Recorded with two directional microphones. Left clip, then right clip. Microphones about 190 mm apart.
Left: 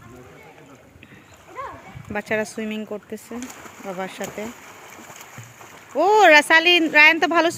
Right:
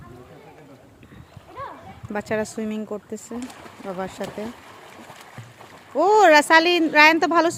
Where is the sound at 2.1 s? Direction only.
10° right (ahead or behind).